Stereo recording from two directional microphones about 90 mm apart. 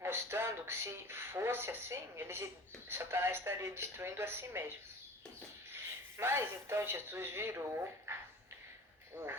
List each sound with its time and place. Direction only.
0.0 s speech: 25° right (ahead or behind)
9.1 s speech: 30° right (ahead or behind)